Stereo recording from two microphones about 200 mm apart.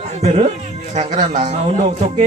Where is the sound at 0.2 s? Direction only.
35° right (ahead or behind).